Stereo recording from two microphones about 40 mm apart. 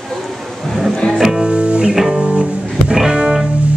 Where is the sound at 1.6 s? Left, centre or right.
Right.